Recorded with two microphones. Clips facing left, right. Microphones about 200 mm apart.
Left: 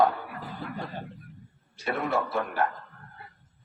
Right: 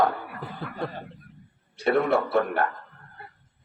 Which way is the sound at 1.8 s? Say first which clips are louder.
Right 6 dB; 60° right (ahead or behind).